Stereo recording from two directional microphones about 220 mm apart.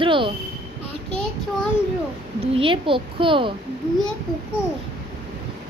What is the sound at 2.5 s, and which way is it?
A woman's voice, 25° right (ahead or behind).